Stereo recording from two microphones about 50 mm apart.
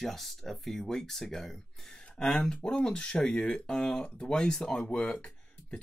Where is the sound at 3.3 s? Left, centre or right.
Left.